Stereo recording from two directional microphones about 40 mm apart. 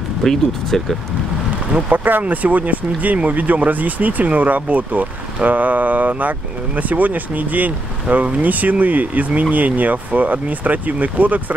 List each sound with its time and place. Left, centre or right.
0.2 s speech: centre
1.9 s speech: right